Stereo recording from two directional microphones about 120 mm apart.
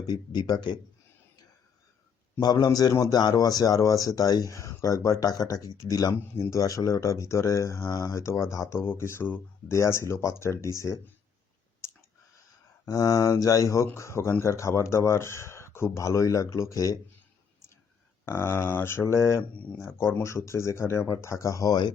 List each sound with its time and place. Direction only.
0.1 s speech: 35° left (ahead or behind)
2.4 s speech: 35° left (ahead or behind)
12.8 s speech: 30° left (ahead or behind)
18.3 s speech: 20° left (ahead or behind); by 21.9 s 35° left (ahead or behind)